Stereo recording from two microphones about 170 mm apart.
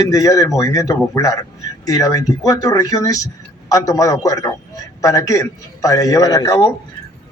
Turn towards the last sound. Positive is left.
turn(degrees=20)  # may be behind; listen again after turning